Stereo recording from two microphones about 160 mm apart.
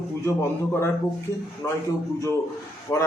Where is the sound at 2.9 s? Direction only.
20° left (ahead or behind).